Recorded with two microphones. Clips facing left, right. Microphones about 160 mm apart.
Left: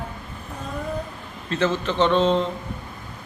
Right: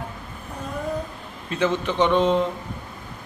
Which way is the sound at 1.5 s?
10° right (ahead or behind).